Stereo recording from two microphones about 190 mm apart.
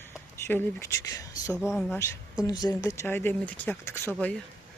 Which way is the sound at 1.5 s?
5° right (ahead or behind).